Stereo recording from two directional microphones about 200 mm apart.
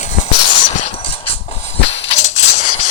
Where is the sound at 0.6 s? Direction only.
35° left (ahead or behind).